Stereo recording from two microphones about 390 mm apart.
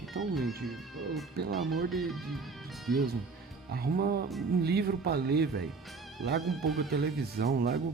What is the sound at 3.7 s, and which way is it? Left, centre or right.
Speech, right.